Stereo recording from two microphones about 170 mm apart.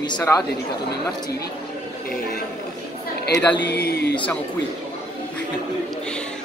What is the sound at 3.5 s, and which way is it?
Speech, 85° left.